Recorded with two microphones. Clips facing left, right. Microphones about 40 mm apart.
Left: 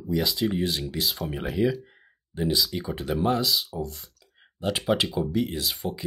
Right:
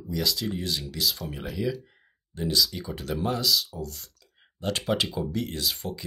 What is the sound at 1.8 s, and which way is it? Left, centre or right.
Speech, centre.